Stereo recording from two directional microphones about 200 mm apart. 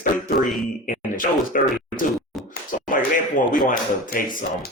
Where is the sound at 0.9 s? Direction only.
45° left (ahead or behind).